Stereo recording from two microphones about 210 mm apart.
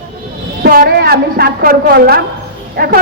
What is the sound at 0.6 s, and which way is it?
A woman's voice, 45° right (ahead or behind).